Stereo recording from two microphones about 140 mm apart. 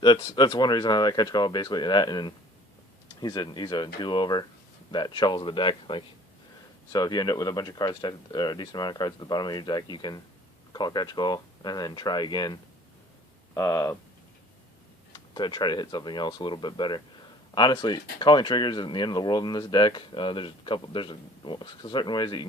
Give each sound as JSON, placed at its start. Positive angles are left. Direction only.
{"t": 0.0, "sound": "speech", "side_deg": 35}
{"t": 13.5, "sound": "speech", "side_deg": 20}
{"t": 15.1, "sound": "speech", "side_deg": 30}